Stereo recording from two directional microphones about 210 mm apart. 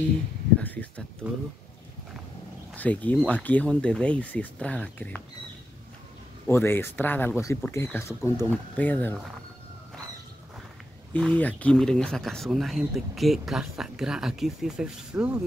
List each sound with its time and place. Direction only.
0.6 s speech: 5° left (ahead or behind)
2.8 s speech: 5° left (ahead or behind)
6.4 s speech: 10° left (ahead or behind)
11.1 s speech: 5° left (ahead or behind)